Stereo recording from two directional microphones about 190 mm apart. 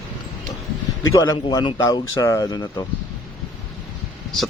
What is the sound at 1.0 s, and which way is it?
Speech, 15° left (ahead or behind).